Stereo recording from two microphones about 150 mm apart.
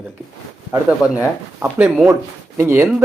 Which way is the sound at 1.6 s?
10° right (ahead or behind).